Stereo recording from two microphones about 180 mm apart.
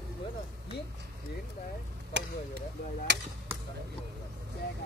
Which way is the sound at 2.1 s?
75° right (ahead or behind).